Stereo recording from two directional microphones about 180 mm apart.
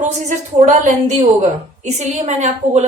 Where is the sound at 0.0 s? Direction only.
40° right (ahead or behind).